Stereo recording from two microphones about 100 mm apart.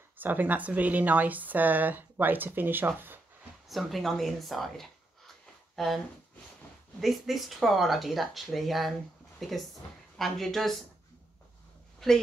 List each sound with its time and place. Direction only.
0.2 s speech: 20° right (ahead or behind)
3.6 s speech: centre (ahead or behind)
7.0 s speech: centre (ahead or behind)
12.0 s speech: 5° left (ahead or behind)